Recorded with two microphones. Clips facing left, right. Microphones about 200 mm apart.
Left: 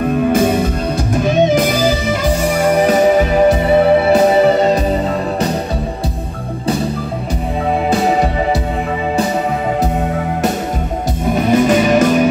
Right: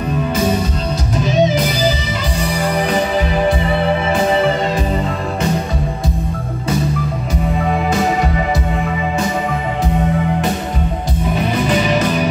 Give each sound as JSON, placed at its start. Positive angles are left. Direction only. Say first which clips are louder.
{"t": 1.2, "sound": "music", "louder": "left 2 dB", "side_deg": 50}
{"t": 11.3, "sound": "music", "louder": "left 6 dB", "side_deg": 45}